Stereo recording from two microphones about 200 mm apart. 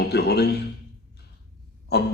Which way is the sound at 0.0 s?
55° left (ahead or behind).